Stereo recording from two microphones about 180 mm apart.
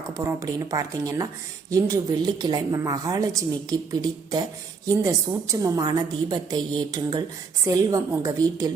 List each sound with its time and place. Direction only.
0.1 s a woman's voice: 20° right (ahead or behind)